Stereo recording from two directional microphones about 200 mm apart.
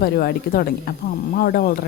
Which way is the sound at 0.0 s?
50° left (ahead or behind).